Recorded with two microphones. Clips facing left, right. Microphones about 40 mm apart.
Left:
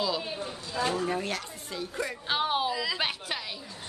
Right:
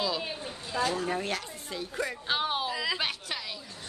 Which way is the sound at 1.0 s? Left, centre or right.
Centre.